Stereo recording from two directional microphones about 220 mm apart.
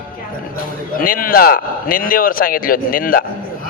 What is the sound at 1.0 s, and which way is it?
A man's voice, 40° left (ahead or behind).